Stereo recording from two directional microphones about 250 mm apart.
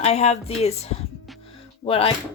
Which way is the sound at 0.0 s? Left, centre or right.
Left.